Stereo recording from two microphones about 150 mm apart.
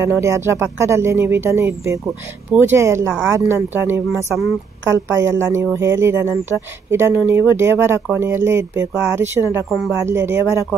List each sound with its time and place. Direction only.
0.0 s speech: 20° right (ahead or behind)